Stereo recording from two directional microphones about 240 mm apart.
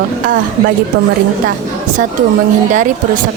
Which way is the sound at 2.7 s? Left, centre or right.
Right.